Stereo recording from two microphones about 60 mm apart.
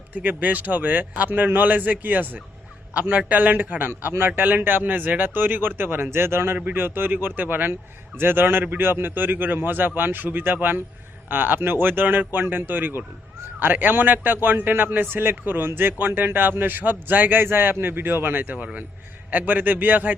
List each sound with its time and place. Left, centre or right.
0.1 s a man's voice: right
18.5 s a man's voice: right